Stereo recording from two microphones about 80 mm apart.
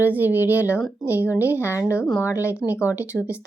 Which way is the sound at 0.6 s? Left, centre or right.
Left.